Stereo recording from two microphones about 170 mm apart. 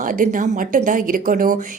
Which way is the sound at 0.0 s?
50° right (ahead or behind).